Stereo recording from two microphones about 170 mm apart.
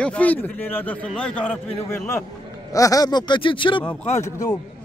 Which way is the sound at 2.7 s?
20° left (ahead or behind).